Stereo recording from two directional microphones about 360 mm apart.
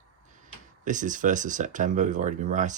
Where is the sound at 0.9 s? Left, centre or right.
Right.